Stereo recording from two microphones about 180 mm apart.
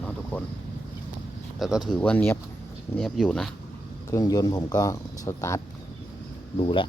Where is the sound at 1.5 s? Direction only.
Centre (ahead or behind).